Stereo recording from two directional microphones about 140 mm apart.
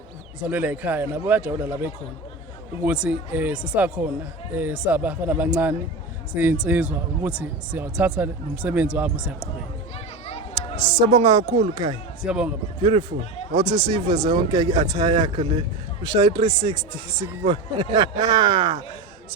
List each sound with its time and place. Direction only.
0.4 s speech: 10° right (ahead or behind)
11.0 s speech: 35° right (ahead or behind)
12.2 s speech: 5° right (ahead or behind)
12.8 s speech: 40° right (ahead or behind)